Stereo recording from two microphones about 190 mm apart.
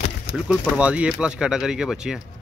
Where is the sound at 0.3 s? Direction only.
50° left (ahead or behind).